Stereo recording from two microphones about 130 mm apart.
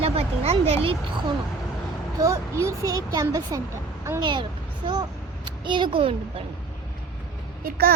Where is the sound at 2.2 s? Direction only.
25° right (ahead or behind); by 6.4 s 45° right (ahead or behind).